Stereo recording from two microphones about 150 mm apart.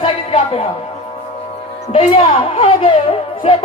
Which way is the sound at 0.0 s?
40° left (ahead or behind).